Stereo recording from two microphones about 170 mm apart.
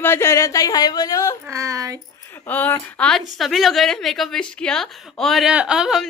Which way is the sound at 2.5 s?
10° left (ahead or behind).